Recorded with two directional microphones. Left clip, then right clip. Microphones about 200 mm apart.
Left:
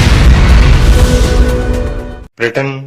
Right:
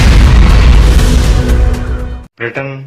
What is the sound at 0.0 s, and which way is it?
Music, centre (ahead or behind).